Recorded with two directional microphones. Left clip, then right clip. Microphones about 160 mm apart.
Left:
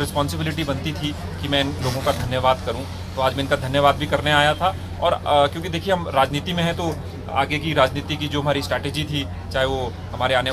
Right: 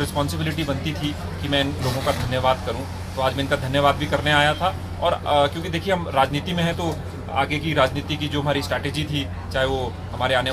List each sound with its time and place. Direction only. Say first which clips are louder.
0.0 s a man's voice: left 1 dB; 5° left (ahead or behind)